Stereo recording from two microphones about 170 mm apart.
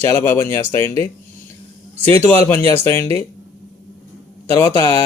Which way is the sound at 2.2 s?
15° left (ahead or behind).